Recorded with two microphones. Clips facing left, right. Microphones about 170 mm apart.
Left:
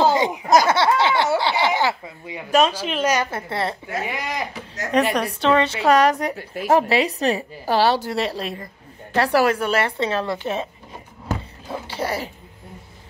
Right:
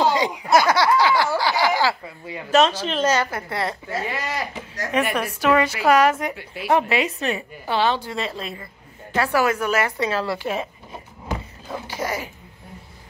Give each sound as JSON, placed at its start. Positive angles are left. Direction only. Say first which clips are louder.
{"t": 0.0, "sound": "a sound", "louder": "left 2 dB", "side_deg": 25}
{"t": 1.8, "sound": "a woman's voice", "louder": "even", "side_deg": 20}
{"t": 3.3, "sound": "a woman's voice", "louder": "left 1 dB", "side_deg": 25}
{"t": 4.0, "sound": "a woman's voice", "louder": "left 1 dB", "side_deg": 15}
{"t": 5.1, "sound": "a woman's voice", "louder": "left 1 dB", "side_deg": 30}
{"t": 11.9, "sound": "a woman's voice", "louder": "left 2 dB", "side_deg": 30}